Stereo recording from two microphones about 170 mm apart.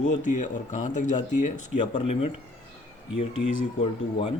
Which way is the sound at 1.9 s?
35° left (ahead or behind).